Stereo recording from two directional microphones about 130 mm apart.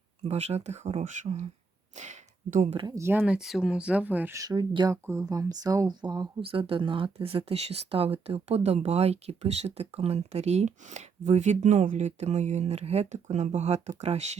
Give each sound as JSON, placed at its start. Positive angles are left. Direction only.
{"t": 0.3, "sound": "speech", "side_deg": -55}
{"t": 2.0, "sound": "a sound", "side_deg": -65}
{"t": 2.7, "sound": "speech", "side_deg": -30}
{"t": 3.0, "sound": "speech", "side_deg": -15}
{"t": 4.4, "sound": "speech", "side_deg": -30}
{"t": 6.4, "sound": "speech", "side_deg": -45}